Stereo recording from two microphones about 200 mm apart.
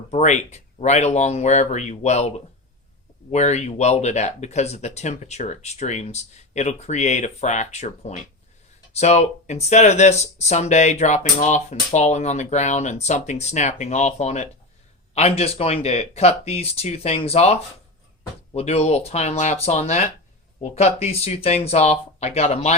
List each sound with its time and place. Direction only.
0.1 s speech: 35° left (ahead or behind)
3.3 s speech: 35° left (ahead or behind)